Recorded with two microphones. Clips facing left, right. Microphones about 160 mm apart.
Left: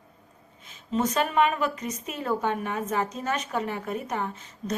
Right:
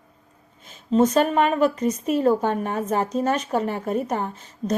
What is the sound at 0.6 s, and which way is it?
A woman's voice, 35° right (ahead or behind).